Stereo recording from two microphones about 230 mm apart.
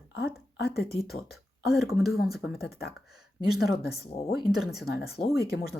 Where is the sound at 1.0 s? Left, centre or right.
Centre.